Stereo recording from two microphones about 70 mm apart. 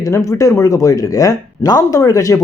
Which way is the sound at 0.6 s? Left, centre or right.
Left.